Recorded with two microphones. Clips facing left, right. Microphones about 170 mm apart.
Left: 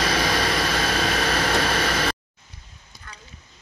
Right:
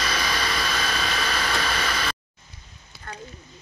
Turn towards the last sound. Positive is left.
turn(degrees=50)  # may be behind; listen again after turning